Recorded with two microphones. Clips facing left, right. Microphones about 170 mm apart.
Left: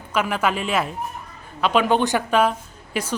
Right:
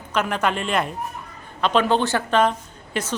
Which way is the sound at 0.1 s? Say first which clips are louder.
Even; 5° left (ahead or behind).